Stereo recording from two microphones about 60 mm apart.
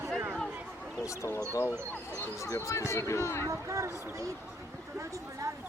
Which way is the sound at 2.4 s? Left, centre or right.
Left.